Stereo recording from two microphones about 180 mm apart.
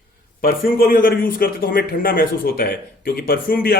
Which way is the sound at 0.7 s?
55° left (ahead or behind).